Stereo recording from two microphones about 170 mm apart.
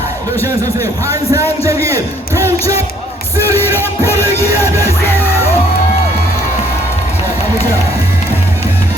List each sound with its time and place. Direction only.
0.4 s a man's voice: 20° right (ahead or behind)
3.6 s music: 15° left (ahead or behind)